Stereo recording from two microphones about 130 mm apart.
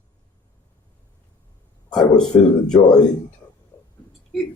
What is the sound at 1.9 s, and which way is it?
Speech, 5° left (ahead or behind).